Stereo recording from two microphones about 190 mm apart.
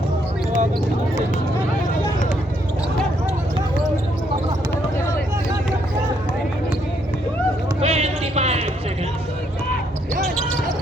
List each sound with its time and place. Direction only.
7.8 s clip-clop: 35° right (ahead or behind)